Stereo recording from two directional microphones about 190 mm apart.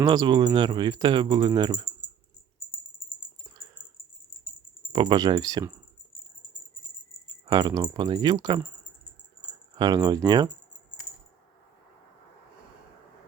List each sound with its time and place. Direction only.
0.0 s speech: 20° right (ahead or behind)
4.9 s speech: 25° right (ahead or behind)
7.4 s speech: 20° right (ahead or behind)
9.7 s speech: 20° right (ahead or behind)